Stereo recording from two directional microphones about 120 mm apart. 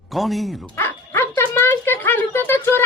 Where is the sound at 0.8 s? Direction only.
20° left (ahead or behind).